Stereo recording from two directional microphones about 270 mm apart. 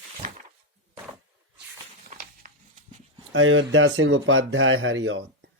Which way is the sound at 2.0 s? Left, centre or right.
Right.